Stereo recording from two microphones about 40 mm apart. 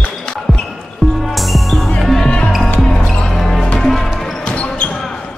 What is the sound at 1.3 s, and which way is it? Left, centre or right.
Music, centre.